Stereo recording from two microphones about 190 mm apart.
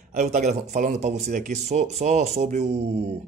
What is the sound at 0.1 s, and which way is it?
Speech, 40° right (ahead or behind).